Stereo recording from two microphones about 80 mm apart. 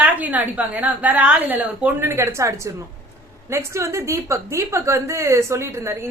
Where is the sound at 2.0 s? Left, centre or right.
Right.